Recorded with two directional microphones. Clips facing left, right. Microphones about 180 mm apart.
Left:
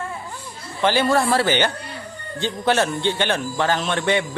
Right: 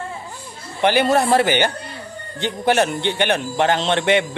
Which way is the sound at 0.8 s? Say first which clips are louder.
Right 2 dB; 20° right (ahead or behind).